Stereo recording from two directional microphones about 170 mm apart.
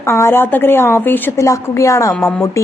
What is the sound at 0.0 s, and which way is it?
A woman's voice, 15° left (ahead or behind).